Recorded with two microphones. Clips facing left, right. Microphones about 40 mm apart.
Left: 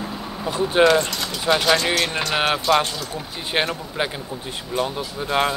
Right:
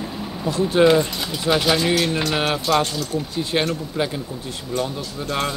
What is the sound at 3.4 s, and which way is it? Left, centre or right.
Speech, centre.